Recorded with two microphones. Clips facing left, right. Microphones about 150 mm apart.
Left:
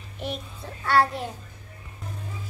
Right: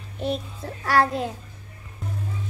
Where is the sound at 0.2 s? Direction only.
35° right (ahead or behind).